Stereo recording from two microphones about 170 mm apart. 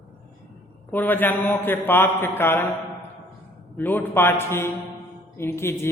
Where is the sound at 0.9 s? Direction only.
10° left (ahead or behind).